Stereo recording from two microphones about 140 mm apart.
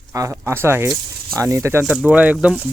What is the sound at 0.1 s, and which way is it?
Speech, 25° right (ahead or behind).